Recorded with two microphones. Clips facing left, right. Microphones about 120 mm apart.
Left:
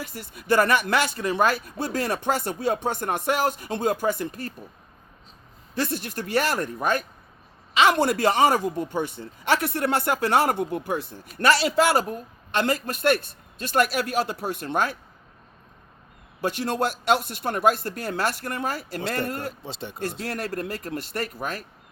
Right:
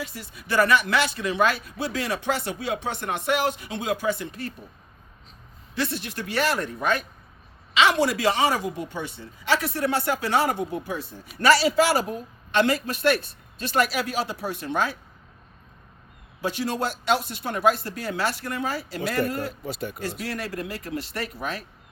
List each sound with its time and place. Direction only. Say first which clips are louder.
0.0 s speech: right 1 dB; 45° left (ahead or behind)
5.7 s speech: left 1 dB; 45° left (ahead or behind)
16.4 s speech: left 2 dB; 50° left (ahead or behind)
19.6 s speech: right 4 dB; 25° left (ahead or behind)
20.2 s speech: left 1 dB; 50° left (ahead or behind)